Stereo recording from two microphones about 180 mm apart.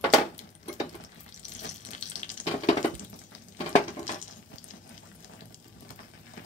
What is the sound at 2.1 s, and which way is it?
Water, 40° left (ahead or behind).